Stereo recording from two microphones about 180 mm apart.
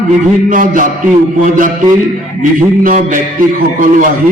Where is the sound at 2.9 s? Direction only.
45° right (ahead or behind).